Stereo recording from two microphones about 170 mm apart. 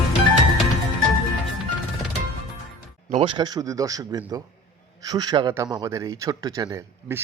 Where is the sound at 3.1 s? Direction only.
35° right (ahead or behind).